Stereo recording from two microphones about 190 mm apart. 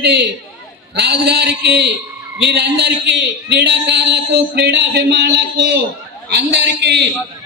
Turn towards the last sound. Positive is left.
turn(degrees=-65)  # may be behind; listen again after turning